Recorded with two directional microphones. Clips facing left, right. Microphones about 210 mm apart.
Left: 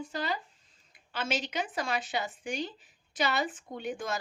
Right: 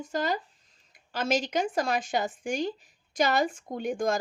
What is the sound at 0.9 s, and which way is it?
A woman's voice, 40° right (ahead or behind).